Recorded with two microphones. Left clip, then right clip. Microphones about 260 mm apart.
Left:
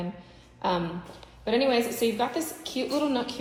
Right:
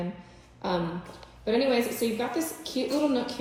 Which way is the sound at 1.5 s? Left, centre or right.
Centre.